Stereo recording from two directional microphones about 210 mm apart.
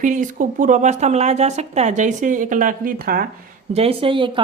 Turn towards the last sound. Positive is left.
turn(degrees=-25)  # may be behind; listen again after turning